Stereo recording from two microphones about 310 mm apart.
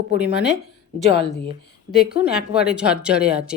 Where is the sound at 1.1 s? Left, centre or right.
Left.